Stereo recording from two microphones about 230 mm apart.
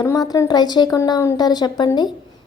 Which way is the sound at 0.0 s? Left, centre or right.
Centre.